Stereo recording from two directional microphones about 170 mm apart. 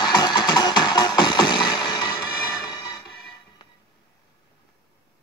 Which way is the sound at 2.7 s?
25° left (ahead or behind).